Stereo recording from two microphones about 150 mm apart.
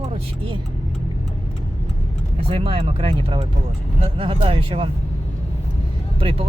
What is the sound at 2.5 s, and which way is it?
Speech, 35° right (ahead or behind).